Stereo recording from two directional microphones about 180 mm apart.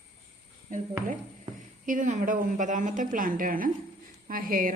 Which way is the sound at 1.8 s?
45° right (ahead or behind).